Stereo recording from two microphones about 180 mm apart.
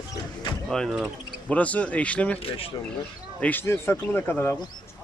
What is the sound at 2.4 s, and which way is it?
Speech, 30° left (ahead or behind).